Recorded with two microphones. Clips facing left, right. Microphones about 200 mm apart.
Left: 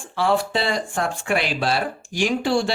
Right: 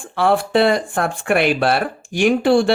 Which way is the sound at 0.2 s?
60° right (ahead or behind).